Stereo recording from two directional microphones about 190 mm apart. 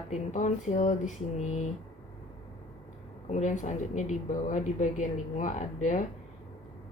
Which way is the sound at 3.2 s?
40° left (ahead or behind).